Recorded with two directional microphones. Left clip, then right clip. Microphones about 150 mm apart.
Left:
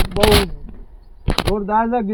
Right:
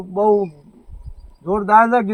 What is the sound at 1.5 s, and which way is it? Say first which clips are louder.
Speech: right 8 dB; 10° right (ahead or behind).